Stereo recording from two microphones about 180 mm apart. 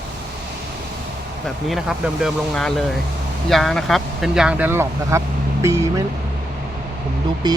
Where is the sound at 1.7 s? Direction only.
Centre (ahead or behind).